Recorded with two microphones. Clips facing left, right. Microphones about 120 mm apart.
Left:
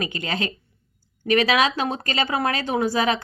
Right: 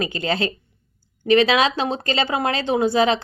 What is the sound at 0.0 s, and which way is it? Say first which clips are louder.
Speech: right 4 dB; 30° right (ahead or behind).